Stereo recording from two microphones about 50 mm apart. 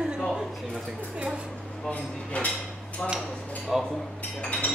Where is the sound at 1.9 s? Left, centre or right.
Left.